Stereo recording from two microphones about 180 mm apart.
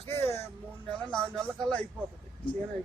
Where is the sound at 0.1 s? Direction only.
15° left (ahead or behind).